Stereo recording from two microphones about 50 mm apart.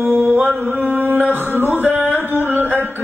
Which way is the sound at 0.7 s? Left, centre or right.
Right.